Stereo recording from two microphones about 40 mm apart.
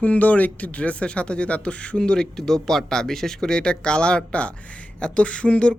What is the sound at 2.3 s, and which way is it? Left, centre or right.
Speech, centre.